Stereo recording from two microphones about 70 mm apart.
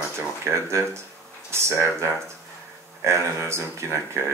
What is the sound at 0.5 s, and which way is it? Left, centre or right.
Speech, right.